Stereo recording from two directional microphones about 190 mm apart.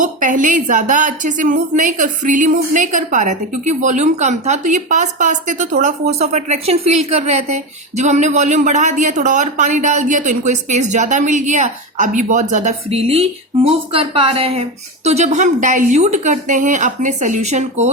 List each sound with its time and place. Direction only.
0.0 s a woman's voice: 40° right (ahead or behind)